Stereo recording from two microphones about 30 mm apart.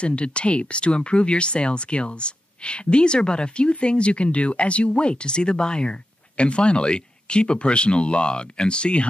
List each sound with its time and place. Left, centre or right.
0.0 s speech: left